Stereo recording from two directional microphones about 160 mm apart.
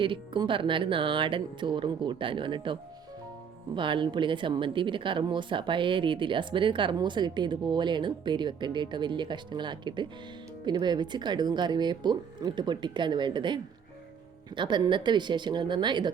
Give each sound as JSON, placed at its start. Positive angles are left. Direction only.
{"t": 0.0, "sound": "speech", "side_deg": -30}
{"t": 3.8, "sound": "a woman's voice", "side_deg": -30}